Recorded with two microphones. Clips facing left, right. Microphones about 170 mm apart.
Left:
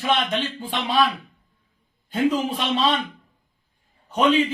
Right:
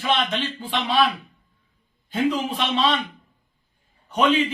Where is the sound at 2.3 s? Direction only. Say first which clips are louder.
Left 1 dB; 35° left (ahead or behind).